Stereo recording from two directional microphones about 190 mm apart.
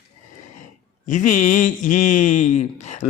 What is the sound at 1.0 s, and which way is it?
A man's voice, 45° left (ahead or behind).